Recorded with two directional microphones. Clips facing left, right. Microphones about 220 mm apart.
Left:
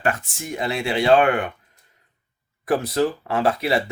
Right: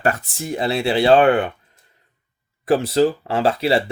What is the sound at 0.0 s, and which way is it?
Speech, 35° right (ahead or behind).